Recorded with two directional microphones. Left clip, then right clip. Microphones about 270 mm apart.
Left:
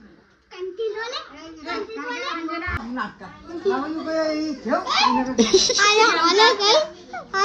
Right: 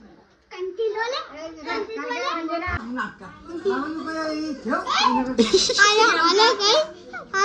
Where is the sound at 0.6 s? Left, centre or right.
Centre.